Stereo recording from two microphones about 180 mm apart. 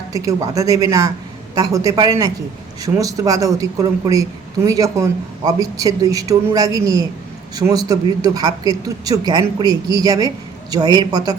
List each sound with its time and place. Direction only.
0.1 s speech: 20° right (ahead or behind)